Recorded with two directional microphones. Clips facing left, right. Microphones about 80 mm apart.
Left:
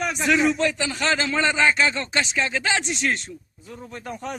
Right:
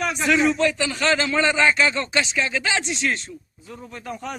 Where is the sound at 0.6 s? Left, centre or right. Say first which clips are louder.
Right 2 dB; left.